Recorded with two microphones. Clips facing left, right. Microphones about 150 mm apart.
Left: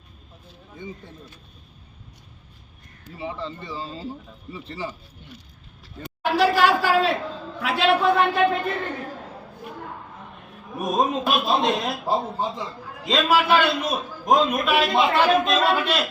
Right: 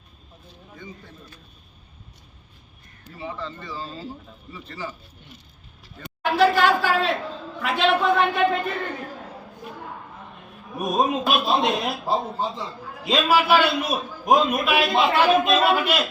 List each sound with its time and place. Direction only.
0.8 s speech: 25° left (ahead or behind)
3.2 s speech: 25° left (ahead or behind)
6.2 s a sound: 5° left (ahead or behind)
6.6 s a man's voice: 10° left (ahead or behind)
10.8 s a man's voice: centre (ahead or behind)
12.0 s a man's voice: 15° left (ahead or behind)
13.1 s a man's voice: 5° right (ahead or behind)